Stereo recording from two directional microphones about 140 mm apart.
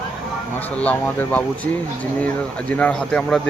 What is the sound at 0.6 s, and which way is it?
A man's voice, 10° left (ahead or behind).